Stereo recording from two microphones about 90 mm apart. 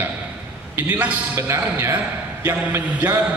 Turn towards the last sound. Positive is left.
turn(degrees=-20)  # may be behind; listen again after turning